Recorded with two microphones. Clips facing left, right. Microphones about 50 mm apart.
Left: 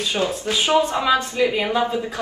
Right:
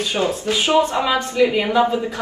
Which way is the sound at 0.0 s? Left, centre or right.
Right.